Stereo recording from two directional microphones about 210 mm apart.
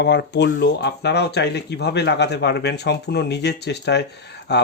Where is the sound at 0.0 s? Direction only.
55° left (ahead or behind).